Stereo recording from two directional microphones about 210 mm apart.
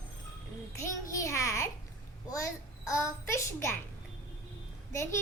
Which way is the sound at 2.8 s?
15° left (ahead or behind).